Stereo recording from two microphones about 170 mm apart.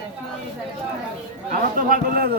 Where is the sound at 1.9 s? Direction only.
60° right (ahead or behind).